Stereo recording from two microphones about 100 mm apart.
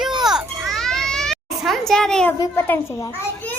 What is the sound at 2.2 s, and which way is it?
Speech, 20° left (ahead or behind).